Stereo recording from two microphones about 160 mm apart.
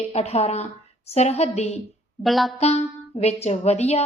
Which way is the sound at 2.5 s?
40° left (ahead or behind).